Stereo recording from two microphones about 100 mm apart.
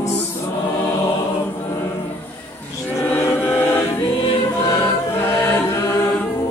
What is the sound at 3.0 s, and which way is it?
Chant, 20° left (ahead or behind).